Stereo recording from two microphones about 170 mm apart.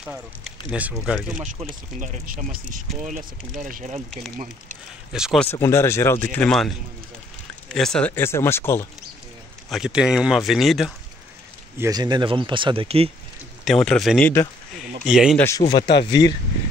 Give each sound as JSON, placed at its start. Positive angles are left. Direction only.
{"t": 0.0, "sound": "speech", "side_deg": -5}
{"t": 1.4, "sound": "speech", "side_deg": -45}
{"t": 5.1, "sound": "speech", "side_deg": -5}
{"t": 5.4, "sound": "speech", "side_deg": 15}
{"t": 7.7, "sound": "speech", "side_deg": 5}
{"t": 9.7, "sound": "speech", "side_deg": -5}
{"t": 11.8, "sound": "speech", "side_deg": -25}
{"t": 13.8, "sound": "speech", "side_deg": 5}
{"t": 15.3, "sound": "speech", "side_deg": 15}